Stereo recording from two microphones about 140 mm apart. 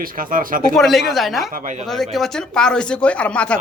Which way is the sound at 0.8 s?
Centre (ahead or behind).